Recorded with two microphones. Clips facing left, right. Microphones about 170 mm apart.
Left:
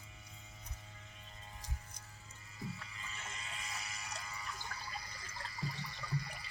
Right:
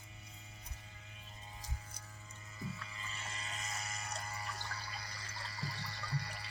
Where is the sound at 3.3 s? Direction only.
40° right (ahead or behind); by 4.6 s 60° right (ahead or behind).